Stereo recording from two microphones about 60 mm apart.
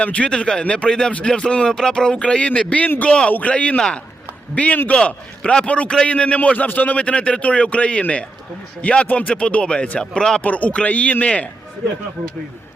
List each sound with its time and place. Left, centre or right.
0.0 s a man's voice: centre
10.4 s a man's voice: left